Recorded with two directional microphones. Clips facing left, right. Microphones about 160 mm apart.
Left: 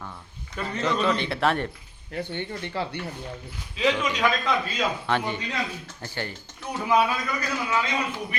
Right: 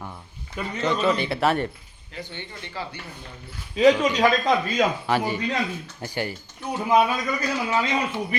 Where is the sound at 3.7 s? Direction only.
40° right (ahead or behind).